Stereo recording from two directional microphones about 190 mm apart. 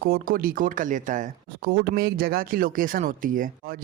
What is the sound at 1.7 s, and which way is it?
Speech, 55° right (ahead or behind).